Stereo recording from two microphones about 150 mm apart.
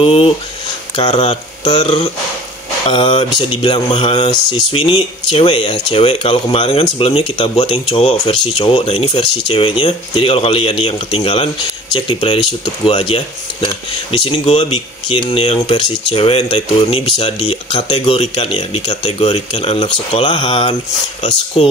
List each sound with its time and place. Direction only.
0.0 s speech: 40° left (ahead or behind)
1.6 s speech: 30° left (ahead or behind); by 17.6 s 45° left (ahead or behind)
17.6 s speech: 30° left (ahead or behind)
17.9 s speech: 40° left (ahead or behind)